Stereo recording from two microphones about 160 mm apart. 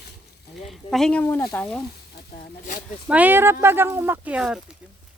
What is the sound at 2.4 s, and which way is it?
Speech, 55° left (ahead or behind).